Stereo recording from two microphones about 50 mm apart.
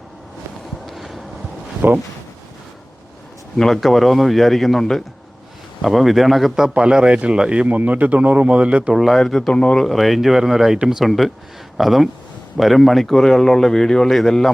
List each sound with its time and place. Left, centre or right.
0.9 s a sound: centre
1.8 s speech: right
3.8 s speech: centre
5.8 s speech: centre
6.7 s speech: centre
7.8 s speech: right
8.9 s speech: centre
9.1 s speech: centre
9.5 s speech: centre
9.8 s speech: centre